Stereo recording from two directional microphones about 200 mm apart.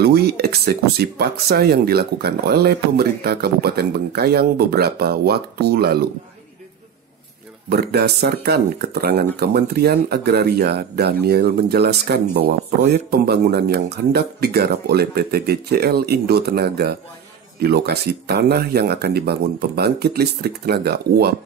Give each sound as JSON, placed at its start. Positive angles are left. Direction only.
{"t": 0.0, "sound": "speech", "side_deg": -50}
{"t": 7.7, "sound": "speech", "side_deg": -55}